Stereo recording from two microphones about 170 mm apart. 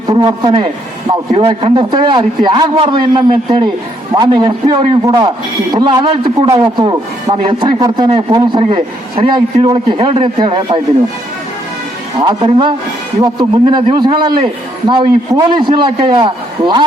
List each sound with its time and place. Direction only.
0.1 s a man's voice: 25° right (ahead or behind)
12.2 s a man's voice: 25° right (ahead or behind)